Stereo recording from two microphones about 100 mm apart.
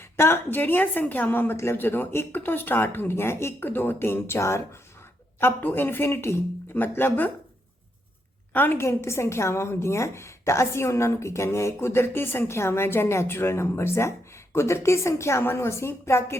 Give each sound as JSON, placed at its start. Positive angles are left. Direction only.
{"t": 0.0, "sound": "a woman's voice", "side_deg": 25}
{"t": 8.5, "sound": "a woman's voice", "side_deg": 20}